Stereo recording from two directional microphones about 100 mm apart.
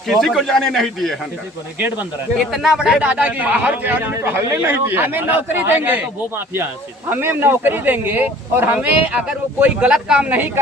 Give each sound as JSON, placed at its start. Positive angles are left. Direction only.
{"t": 0.1, "sound": "speech", "side_deg": 0}
{"t": 2.5, "sound": "speech", "side_deg": -5}